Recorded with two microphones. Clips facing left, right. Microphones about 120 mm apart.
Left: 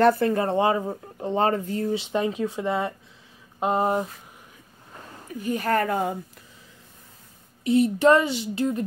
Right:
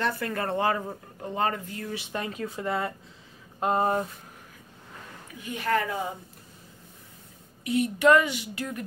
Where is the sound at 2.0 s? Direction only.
20° left (ahead or behind).